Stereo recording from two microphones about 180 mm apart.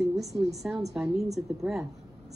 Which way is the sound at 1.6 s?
5° right (ahead or behind).